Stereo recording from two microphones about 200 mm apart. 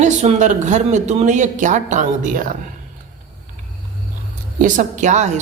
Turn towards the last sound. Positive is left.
turn(degrees=-35)  # may be behind; listen again after turning